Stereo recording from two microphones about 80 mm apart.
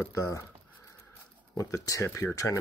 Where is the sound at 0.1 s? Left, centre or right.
Left.